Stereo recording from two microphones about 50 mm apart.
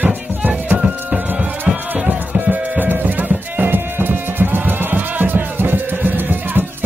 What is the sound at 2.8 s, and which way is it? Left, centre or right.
Music, right.